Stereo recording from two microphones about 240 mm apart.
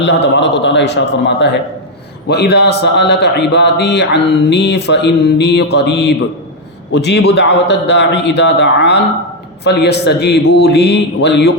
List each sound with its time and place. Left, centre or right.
0.0 s a man's voice: left